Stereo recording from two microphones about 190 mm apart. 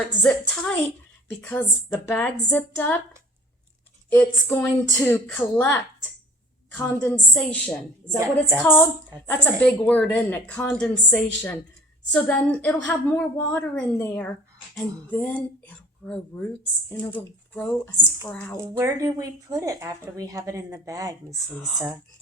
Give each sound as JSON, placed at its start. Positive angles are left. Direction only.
{"t": 0.2, "sound": "a woman's voice", "side_deg": 5}
{"t": 4.1, "sound": "a woman's voice", "side_deg": 10}
{"t": 18.6, "sound": "a woman's voice", "side_deg": -15}